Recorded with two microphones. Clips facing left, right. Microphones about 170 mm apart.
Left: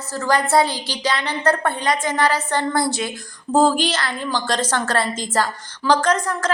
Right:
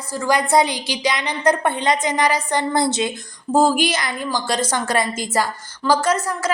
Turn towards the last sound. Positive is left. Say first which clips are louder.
# even
turn(degrees=-10)  # may be behind; listen again after turning